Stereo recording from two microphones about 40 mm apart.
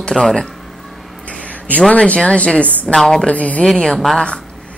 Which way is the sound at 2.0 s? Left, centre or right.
Left.